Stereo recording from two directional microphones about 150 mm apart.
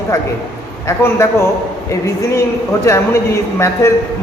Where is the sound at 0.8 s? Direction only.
20° left (ahead or behind).